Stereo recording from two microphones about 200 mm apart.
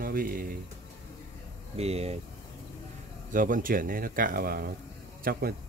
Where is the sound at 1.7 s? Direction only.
30° right (ahead or behind).